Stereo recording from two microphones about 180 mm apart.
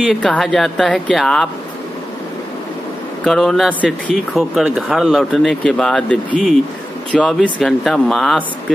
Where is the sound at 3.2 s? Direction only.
Centre (ahead or behind).